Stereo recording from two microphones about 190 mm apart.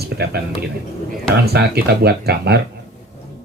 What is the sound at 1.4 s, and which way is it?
Speech, 55° right (ahead or behind).